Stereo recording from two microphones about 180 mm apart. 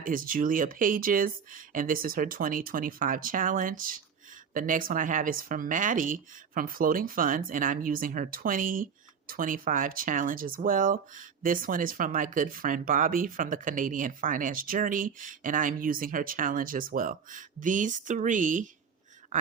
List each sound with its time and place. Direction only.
0.0 s speech: 50° right (ahead or behind)